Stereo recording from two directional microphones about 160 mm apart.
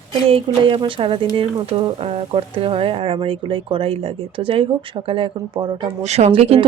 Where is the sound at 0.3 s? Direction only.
35° right (ahead or behind).